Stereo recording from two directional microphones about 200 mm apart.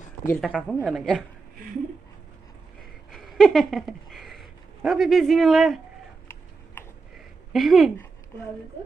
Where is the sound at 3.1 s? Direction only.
Centre (ahead or behind).